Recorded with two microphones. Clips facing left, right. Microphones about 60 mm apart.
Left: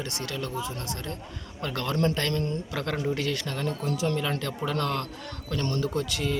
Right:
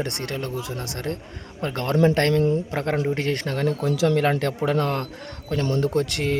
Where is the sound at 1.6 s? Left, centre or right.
Right.